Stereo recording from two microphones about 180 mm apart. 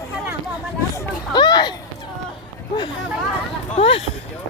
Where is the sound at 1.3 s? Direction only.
25° left (ahead or behind).